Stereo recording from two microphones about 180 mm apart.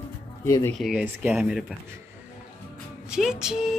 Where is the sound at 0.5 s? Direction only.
15° left (ahead or behind).